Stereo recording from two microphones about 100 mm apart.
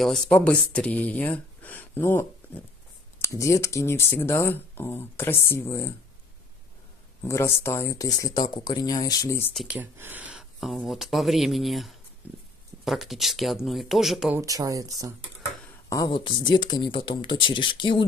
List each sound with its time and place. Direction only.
0.0 s speech: centre (ahead or behind); by 5.9 s 30° left (ahead or behind)
7.2 s speech: 25° left (ahead or behind)
9.7 s speech: 20° right (ahead or behind)
10.3 s speech: centre (ahead or behind)
14.4 s speech: 35° right (ahead or behind)
15.9 s speech: 35° left (ahead or behind)
16.3 s speech: 50° left (ahead or behind)